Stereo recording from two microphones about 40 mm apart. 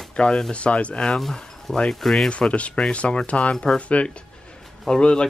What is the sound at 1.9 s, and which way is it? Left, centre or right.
Speech, centre.